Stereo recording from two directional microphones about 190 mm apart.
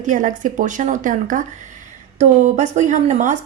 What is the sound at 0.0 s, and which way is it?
Speech, 45° right (ahead or behind).